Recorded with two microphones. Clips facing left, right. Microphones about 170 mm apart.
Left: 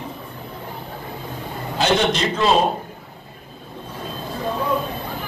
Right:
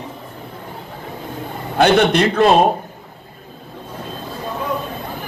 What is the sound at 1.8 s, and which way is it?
Speech, 60° right (ahead or behind).